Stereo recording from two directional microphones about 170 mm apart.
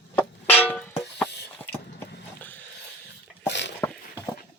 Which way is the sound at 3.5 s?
90° left.